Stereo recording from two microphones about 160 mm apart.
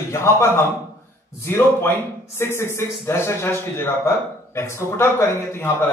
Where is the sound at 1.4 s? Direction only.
15° left (ahead or behind).